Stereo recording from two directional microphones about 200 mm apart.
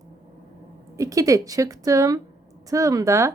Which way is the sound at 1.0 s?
15° right (ahead or behind).